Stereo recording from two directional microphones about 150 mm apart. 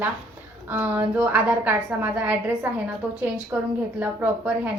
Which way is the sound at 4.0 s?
10° right (ahead or behind).